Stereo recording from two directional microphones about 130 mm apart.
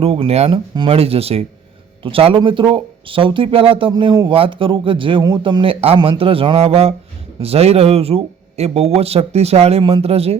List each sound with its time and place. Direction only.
0.0 s speech: 50° right (ahead or behind)